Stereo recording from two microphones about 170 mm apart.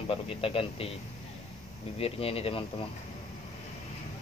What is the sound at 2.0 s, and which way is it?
Speech, 35° left (ahead or behind).